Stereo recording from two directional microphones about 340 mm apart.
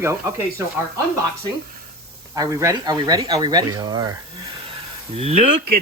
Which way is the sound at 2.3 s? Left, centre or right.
Centre.